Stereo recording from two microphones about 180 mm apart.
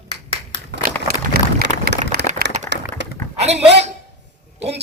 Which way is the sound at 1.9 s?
60° right (ahead or behind).